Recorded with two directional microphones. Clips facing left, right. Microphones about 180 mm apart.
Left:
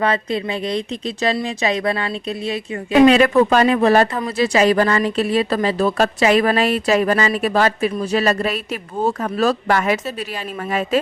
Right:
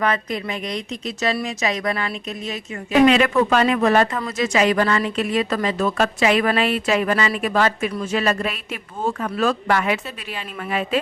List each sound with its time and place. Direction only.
0.0 s a woman's voice: 30° left (ahead or behind)